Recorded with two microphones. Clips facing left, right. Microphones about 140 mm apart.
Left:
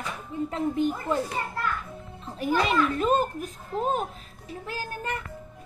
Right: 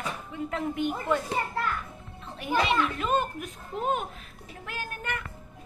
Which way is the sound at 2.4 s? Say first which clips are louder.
Left 2 dB; 40° left (ahead or behind).